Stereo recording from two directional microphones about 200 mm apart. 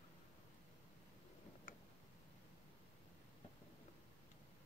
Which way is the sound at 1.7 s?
45° left (ahead or behind).